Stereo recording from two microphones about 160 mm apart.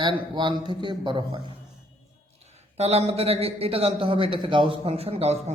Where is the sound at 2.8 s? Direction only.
40° right (ahead or behind).